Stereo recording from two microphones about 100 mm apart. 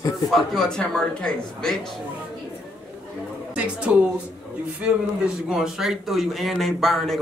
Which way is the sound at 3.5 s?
10° right (ahead or behind).